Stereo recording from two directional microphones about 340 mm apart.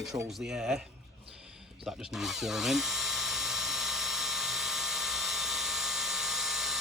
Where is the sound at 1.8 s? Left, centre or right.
Centre.